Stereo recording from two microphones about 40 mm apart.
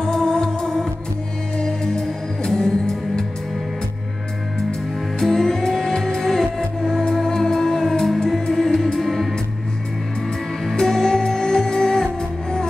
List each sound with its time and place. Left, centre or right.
0.0 s music: centre
5.2 s music: centre
10.6 s music: centre